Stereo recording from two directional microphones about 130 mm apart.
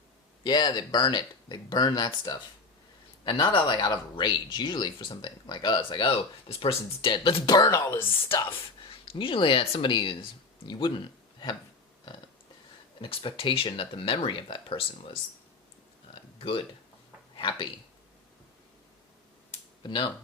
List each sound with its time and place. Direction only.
0.4 s speech: 35° left (ahead or behind)
7.4 s speech: 30° left (ahead or behind)
8.4 s a woman's voice: 45° left (ahead or behind)
13.0 s speech: 40° left (ahead or behind)
16.4 s speech: 45° left (ahead or behind)
19.8 s speech: 35° left (ahead or behind)